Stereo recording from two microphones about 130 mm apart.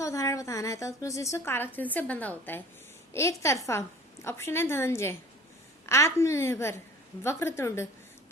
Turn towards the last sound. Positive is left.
turn(degrees=20)  # may be behind; listen again after turning